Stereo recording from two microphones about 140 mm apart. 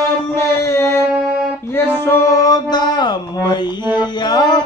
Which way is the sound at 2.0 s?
20° left (ahead or behind).